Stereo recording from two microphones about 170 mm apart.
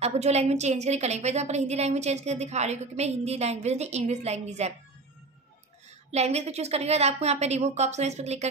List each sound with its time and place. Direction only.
0.0 s a woman's voice: 40° right (ahead or behind)
6.1 s a woman's voice: 40° right (ahead or behind)